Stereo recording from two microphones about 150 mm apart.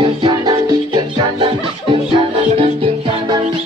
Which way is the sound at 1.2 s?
40° right (ahead or behind).